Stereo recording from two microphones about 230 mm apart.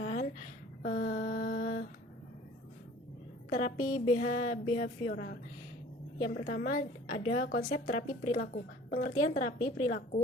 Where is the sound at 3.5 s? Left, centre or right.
Left.